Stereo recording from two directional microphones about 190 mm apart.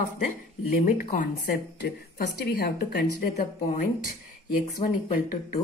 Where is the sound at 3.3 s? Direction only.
40° left (ahead or behind).